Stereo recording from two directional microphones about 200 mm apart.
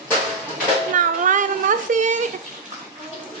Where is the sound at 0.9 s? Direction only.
40° right (ahead or behind).